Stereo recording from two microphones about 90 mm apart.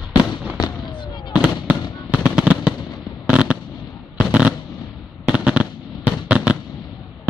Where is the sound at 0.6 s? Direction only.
55° left (ahead or behind).